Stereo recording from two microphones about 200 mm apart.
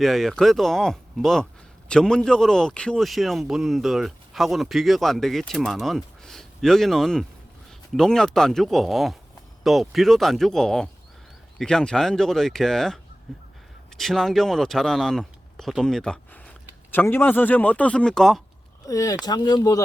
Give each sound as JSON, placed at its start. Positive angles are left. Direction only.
{"t": 0.0, "sound": "a man's voice", "side_deg": 0}
{"t": 13.3, "sound": "a sound", "side_deg": 0}
{"t": 13.9, "sound": "speech", "side_deg": 0}
{"t": 18.9, "sound": "speech", "side_deg": 15}